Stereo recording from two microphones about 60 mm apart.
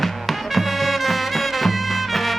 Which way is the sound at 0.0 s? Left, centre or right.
Centre.